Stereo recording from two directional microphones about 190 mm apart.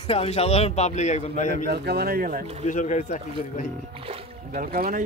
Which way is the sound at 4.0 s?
30° right (ahead or behind).